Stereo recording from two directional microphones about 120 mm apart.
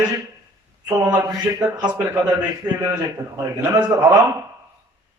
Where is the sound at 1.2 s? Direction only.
35° right (ahead or behind).